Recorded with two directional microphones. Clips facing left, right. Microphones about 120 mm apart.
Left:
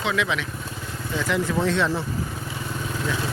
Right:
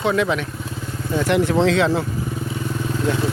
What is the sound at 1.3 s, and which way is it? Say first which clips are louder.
Speech: right 6 dB; 70° right (ahead or behind).